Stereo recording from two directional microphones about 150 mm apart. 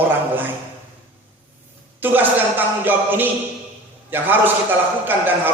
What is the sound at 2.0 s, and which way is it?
A man's voice, 10° right (ahead or behind).